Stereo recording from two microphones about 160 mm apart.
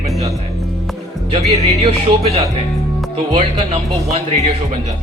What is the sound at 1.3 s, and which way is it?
Speech, 40° right (ahead or behind).